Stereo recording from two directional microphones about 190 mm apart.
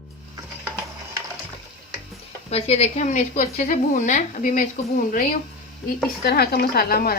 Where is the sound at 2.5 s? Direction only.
35° left (ahead or behind).